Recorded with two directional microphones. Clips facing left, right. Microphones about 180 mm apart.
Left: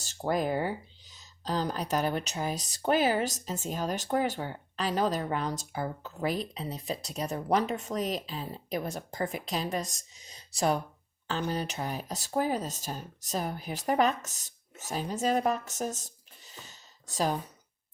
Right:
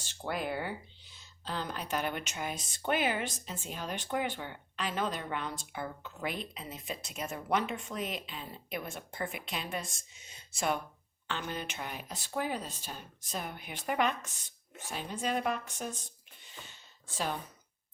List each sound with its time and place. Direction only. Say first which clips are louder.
0.0 s speech: left 7 dB; 40° left (ahead or behind)